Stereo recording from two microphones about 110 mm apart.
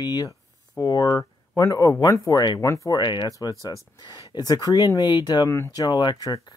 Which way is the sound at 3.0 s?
45° left (ahead or behind).